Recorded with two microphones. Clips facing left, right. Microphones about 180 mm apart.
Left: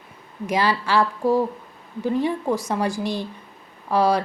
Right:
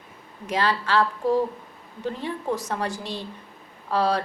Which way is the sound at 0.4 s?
10° left (ahead or behind).